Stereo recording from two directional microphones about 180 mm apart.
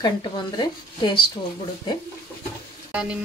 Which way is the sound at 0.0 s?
25° left (ahead or behind).